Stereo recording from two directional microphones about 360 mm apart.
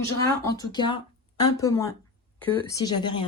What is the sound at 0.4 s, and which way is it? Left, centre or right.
Speech, centre.